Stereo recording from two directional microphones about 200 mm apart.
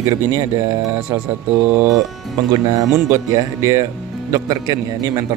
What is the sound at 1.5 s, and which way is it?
A man's voice, 10° right (ahead or behind).